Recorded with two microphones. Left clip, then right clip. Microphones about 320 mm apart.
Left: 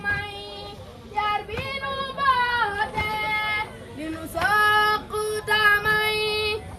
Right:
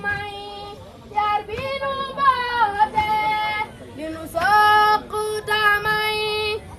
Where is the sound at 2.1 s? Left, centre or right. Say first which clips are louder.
Right 2 dB; centre.